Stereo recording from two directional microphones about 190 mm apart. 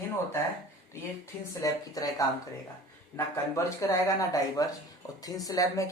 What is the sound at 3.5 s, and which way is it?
Speech, 15° left (ahead or behind).